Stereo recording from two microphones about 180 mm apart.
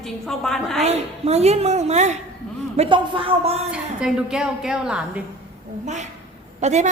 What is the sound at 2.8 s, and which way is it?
Speech, 30° right (ahead or behind).